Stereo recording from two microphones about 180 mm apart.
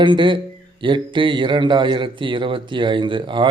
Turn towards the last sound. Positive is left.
turn(degrees=-25)  # may be behind; listen again after turning